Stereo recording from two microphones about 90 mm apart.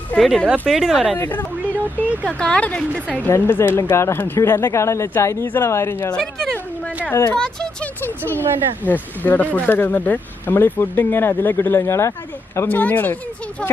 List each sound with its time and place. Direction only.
0.2 s speech: 5° left (ahead or behind)
1.1 s speech: 20° left (ahead or behind)
3.2 s speech: 25° left (ahead or behind)
6.1 s a sound: 5° left (ahead or behind)
7.3 s speech: 10° left (ahead or behind)
8.0 s speech: 20° left (ahead or behind)
12.6 s speech: 20° left (ahead or behind)